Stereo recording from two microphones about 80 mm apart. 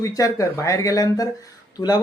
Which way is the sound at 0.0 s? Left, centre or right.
Left.